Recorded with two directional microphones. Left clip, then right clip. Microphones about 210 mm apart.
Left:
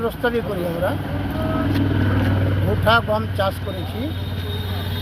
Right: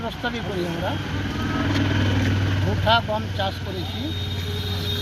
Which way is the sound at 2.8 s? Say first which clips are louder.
Left 3 dB; 15° left (ahead or behind).